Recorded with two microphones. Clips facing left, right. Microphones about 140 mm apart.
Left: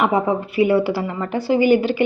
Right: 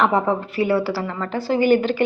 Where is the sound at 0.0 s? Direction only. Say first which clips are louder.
Even; 10° left (ahead or behind).